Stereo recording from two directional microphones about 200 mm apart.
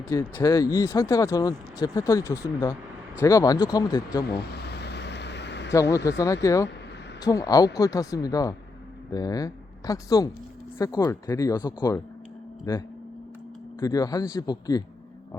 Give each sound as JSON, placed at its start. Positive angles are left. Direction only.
{"t": 0.1, "sound": "speech", "side_deg": 15}
{"t": 4.3, "sound": "a sound", "side_deg": 55}
{"t": 6.1, "sound": "speech", "side_deg": 15}